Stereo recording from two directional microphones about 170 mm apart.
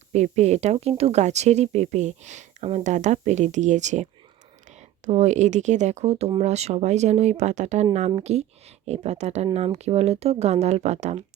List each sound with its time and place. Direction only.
0.1 s speech: 40° right (ahead or behind)